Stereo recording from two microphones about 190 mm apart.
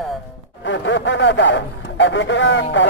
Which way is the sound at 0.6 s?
70° left (ahead or behind).